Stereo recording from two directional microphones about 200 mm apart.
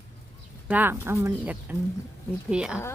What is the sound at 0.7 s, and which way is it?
Speech, 10° right (ahead or behind).